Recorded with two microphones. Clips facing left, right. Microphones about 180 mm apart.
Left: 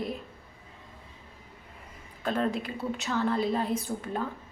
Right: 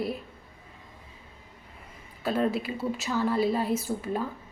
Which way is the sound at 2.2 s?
5° right (ahead or behind).